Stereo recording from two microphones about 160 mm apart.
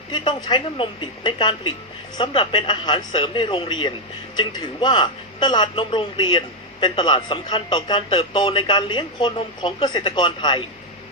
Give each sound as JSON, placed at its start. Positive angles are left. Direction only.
{"t": 0.1, "sound": "a woman's voice", "side_deg": 30}